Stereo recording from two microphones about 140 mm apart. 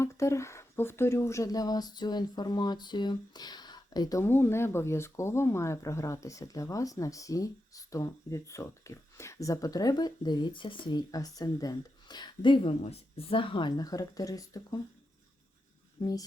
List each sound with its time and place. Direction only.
0.0 s speech: 20° left (ahead or behind)
12.9 s speech: 45° left (ahead or behind); by 14.8 s 25° left (ahead or behind)
16.0 s speech: 25° left (ahead or behind)